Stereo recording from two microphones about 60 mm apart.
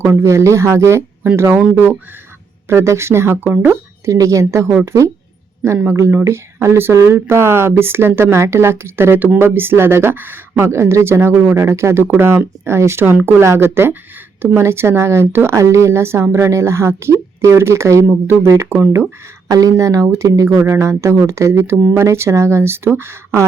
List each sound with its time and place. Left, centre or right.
0.0 s a woman's voice: right
2.6 s a woman's voice: right
5.9 s a woman's voice: right
10.6 s a woman's voice: right
12.0 s a woman's voice: right
15.5 s a woman's voice: right
19.5 s a woman's voice: right